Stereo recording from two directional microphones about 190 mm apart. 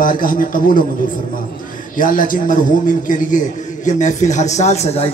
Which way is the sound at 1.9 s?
45° left (ahead or behind).